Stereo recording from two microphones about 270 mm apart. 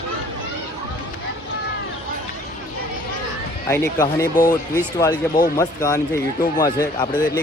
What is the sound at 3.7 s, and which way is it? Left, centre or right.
Speech, centre.